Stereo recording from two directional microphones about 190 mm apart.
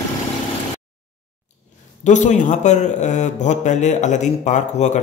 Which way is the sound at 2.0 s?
40° left (ahead or behind).